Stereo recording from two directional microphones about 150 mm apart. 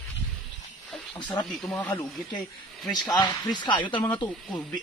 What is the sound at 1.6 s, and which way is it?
Speech, 10° left (ahead or behind).